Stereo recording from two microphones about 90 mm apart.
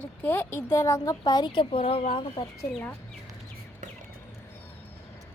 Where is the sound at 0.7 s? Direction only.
35° left (ahead or behind); by 2.4 s 75° left (ahead or behind).